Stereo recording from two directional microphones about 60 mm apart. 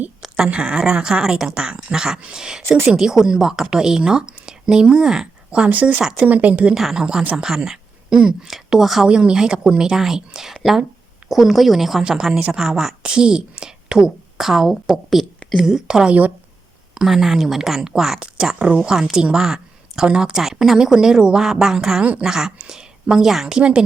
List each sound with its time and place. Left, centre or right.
0.3 s speech: centre
2.6 s speech: right
2.9 s speech: centre; by 6.0 s right
6.0 s speech: centre
6.2 s speech: right
6.7 s speech: centre
9.0 s speech: centre
20.3 s speech: centre